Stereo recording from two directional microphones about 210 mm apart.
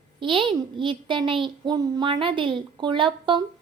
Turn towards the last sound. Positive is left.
turn(degrees=-20)  # may be behind; listen again after turning